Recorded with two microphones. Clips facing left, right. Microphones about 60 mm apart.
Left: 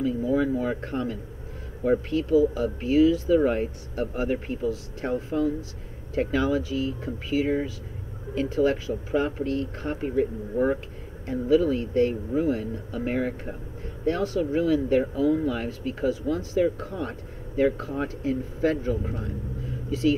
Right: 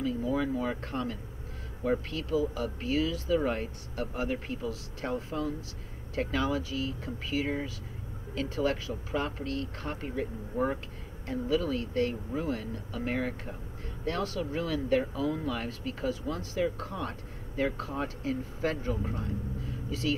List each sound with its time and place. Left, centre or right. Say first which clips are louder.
0.0 s a sound: left 6 dB; centre
0.8 s speech: left 5 dB; centre
19.9 s speech: left 8 dB; centre